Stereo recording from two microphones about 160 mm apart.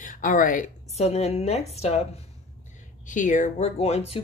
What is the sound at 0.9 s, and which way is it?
Speech, 40° left (ahead or behind).